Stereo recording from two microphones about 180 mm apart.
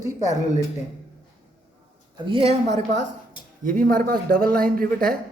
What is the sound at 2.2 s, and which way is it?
Speech, 30° right (ahead or behind).